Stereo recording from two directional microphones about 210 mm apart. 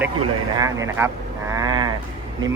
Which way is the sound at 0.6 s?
15° right (ahead or behind).